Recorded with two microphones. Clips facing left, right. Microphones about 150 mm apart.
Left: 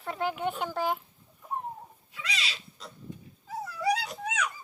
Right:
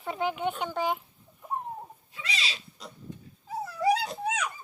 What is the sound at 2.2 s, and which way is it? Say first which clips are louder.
Pig: right 1 dB; 30° right (ahead or behind).